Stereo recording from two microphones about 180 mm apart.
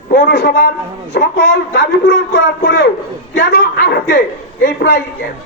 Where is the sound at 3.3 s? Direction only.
65° left (ahead or behind).